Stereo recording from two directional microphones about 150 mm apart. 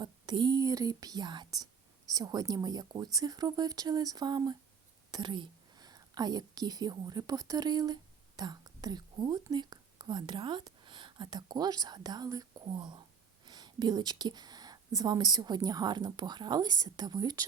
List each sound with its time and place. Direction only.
0.0 s a woman's voice: 30° right (ahead or behind)